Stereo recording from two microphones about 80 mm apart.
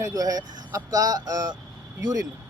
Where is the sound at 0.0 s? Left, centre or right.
Right.